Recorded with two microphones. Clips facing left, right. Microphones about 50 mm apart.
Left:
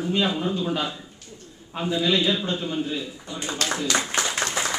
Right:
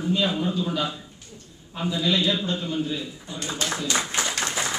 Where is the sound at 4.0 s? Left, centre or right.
Left.